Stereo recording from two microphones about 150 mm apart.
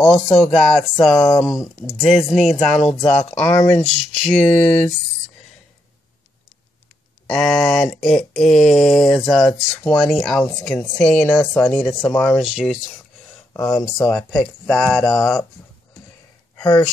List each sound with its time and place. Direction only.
0.0 s speech: 5° left (ahead or behind)
7.2 s speech: centre (ahead or behind)
13.5 s a sound: 20° left (ahead or behind)
13.7 s speech: 35° left (ahead or behind)
14.0 s speech: centre (ahead or behind)
16.5 s a sound: 25° left (ahead or behind)